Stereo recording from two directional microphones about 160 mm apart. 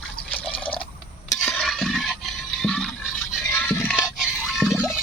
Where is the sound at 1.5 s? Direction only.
5° left (ahead or behind).